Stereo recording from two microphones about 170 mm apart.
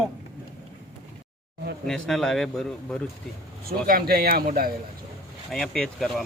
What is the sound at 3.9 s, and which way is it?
Speech, 60° right (ahead or behind).